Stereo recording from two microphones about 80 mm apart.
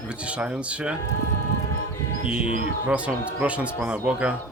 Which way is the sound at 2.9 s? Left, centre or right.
Centre.